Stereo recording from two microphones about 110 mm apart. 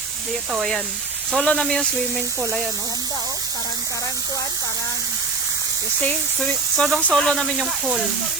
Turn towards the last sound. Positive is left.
turn(degrees=-5)  # may be behind; listen again after turning